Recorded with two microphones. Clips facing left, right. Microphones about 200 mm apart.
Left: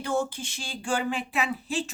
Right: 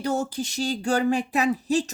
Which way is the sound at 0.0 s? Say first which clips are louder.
Right 2 dB; 40° right (ahead or behind).